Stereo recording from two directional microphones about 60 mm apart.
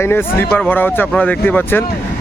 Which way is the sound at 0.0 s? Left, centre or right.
Left.